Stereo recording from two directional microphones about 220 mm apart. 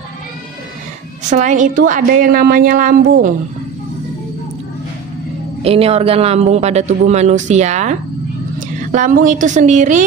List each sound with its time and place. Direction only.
1.3 s speech: 35° right (ahead or behind)
5.6 s speech: 25° right (ahead or behind)